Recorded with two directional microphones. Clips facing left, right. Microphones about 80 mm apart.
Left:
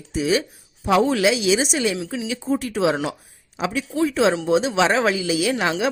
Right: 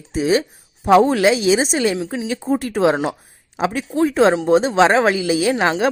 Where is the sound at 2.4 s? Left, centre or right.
Right.